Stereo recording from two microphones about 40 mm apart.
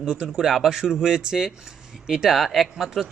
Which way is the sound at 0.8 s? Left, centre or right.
Centre.